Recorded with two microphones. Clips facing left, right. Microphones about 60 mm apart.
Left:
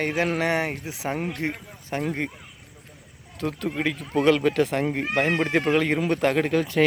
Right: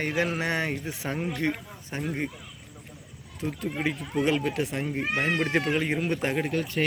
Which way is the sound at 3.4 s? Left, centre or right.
Left.